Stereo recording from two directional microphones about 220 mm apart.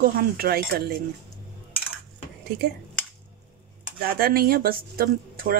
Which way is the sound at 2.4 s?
45° right (ahead or behind).